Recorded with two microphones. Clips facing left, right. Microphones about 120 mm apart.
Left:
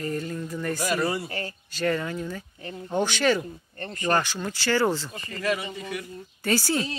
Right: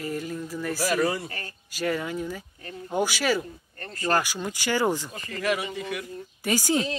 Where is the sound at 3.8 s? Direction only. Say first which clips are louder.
Left 1 dB; 25° left (ahead or behind).